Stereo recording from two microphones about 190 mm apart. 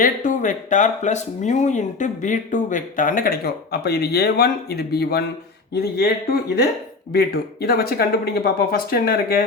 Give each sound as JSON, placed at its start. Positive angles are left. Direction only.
{"t": 0.0, "sound": "speech", "side_deg": 40}
{"t": 7.1, "sound": "speech", "side_deg": 55}